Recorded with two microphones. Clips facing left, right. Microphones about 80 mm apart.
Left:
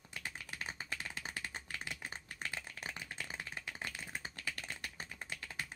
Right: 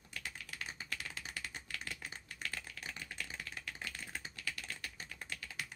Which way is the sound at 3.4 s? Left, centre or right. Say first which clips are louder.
Left 1 dB; left.